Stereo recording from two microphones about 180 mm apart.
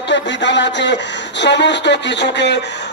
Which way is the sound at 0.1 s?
80° left.